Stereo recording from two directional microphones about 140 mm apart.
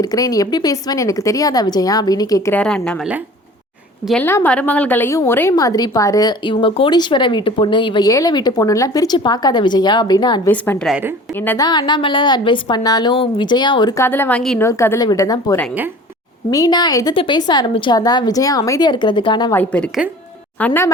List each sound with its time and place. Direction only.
0.0 s speech: 25° left (ahead or behind)
2.5 s a woman's voice: 10° left (ahead or behind)
4.1 s a woman's voice: 15° left (ahead or behind); by 10.4 s 30° left (ahead or behind)
10.4 s a woman's voice: 15° left (ahead or behind)
11.5 s speech: 30° left (ahead or behind)
13.9 s a woman's voice: 15° left (ahead or behind)
14.6 s speech: 20° left (ahead or behind); by 19.5 s 35° left (ahead or behind)
19.5 s a woman's voice: 10° left (ahead or behind)